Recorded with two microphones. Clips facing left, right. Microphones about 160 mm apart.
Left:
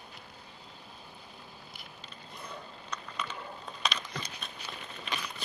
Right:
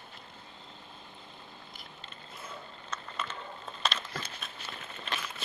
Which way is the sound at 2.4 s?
5° right (ahead or behind).